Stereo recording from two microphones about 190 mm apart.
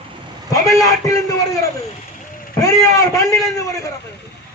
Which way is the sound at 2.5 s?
20° left (ahead or behind).